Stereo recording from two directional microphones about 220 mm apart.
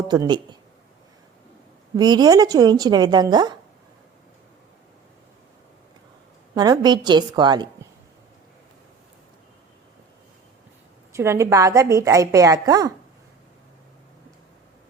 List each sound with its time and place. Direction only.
0.1 s a woman's voice: 20° right (ahead or behind)
2.0 s a woman's voice: 20° right (ahead or behind)
6.5 s a woman's voice: 20° right (ahead or behind)
11.1 s a woman's voice: 10° right (ahead or behind)